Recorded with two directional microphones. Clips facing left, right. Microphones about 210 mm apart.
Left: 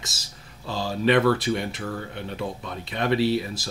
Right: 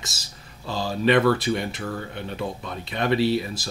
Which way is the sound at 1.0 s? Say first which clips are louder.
Right 1 dB; 40° right (ahead or behind).